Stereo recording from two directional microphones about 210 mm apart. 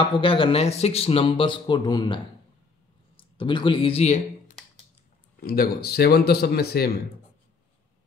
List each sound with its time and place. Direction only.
0.0 s speech: 25° left (ahead or behind)
5.4 s speech: 45° left (ahead or behind)